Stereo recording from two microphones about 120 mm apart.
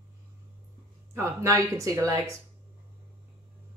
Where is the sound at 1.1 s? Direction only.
25° right (ahead or behind).